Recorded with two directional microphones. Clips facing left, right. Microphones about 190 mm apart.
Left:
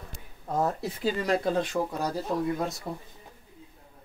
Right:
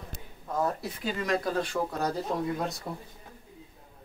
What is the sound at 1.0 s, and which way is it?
Speech, 30° left (ahead or behind).